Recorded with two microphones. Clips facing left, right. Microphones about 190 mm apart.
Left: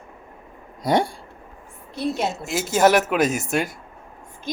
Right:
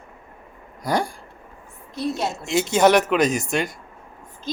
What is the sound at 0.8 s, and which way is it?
Speech, 25° left (ahead or behind).